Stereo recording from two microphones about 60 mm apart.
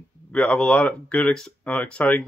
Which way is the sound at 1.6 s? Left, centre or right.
Left.